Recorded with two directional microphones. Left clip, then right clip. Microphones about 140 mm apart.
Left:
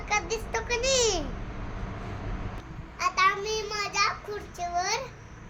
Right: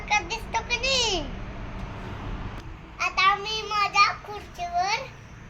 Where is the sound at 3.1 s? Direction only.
30° left (ahead or behind).